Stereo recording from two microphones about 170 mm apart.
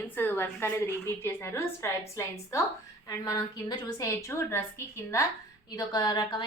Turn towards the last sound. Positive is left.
turn(degrees=25)  # may be behind; listen again after turning